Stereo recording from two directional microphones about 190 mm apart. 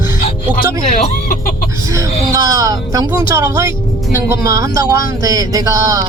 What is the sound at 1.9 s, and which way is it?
Music, 15° right (ahead or behind).